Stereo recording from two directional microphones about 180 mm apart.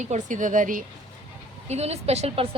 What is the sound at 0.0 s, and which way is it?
Speech, 45° right (ahead or behind).